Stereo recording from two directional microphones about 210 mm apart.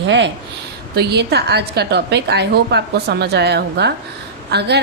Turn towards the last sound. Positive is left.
turn(degrees=-50)  # may be behind; listen again after turning